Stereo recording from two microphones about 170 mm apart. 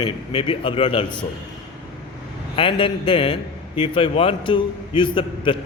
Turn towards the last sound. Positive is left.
turn(degrees=30)  # may be behind; listen again after turning